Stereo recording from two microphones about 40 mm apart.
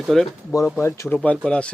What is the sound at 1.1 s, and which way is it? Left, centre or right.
Speech, left.